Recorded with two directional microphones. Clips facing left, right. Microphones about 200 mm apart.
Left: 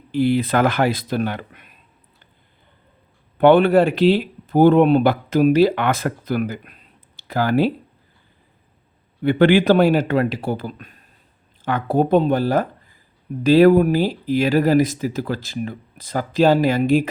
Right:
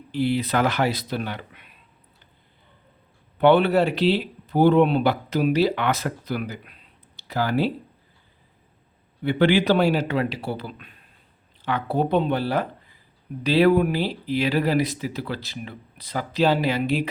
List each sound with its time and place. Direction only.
0.1 s speech: 50° left (ahead or behind)
3.3 s speech: 50° left (ahead or behind)
9.2 s speech: 50° left (ahead or behind)